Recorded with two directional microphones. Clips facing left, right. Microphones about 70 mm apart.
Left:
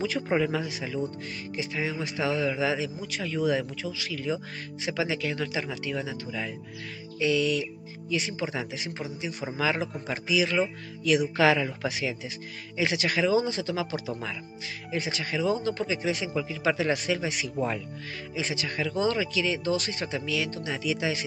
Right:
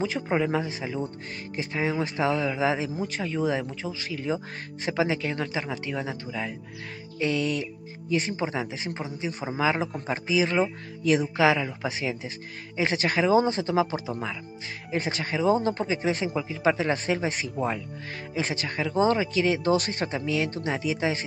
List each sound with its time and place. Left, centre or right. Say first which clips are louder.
0.2 s a man's voice: even; centre
0.5 s speech: right 3 dB; right
7.2 s speech: left 1 dB; right
11.3 s a man's voice: even; centre
11.9 s speech: right 1 dB; right
17.6 s a man's voice: even; centre
18.3 s speech: right 2 dB; right
18.8 s speech: right 4 dB; right
20.2 s speech: right 2 dB; right